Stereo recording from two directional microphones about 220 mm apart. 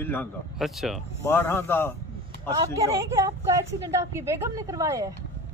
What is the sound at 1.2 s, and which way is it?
Speech, 10° left (ahead or behind).